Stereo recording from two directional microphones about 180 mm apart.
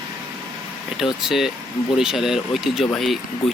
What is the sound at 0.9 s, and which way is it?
Speech, centre (ahead or behind).